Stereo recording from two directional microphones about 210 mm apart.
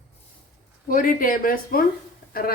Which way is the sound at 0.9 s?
40° left (ahead or behind).